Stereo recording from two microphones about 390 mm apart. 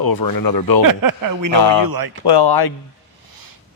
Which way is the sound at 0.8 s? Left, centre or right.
Right.